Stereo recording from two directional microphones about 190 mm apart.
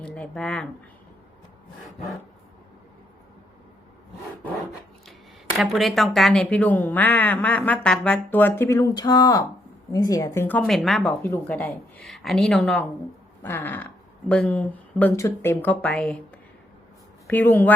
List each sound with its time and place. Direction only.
0.0 s speech: 5° left (ahead or behind)
5.5 s a woman's voice: centre (ahead or behind)
17.2 s a woman's voice: 10° left (ahead or behind)